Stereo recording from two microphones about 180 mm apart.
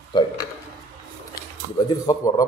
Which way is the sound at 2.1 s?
20° left (ahead or behind).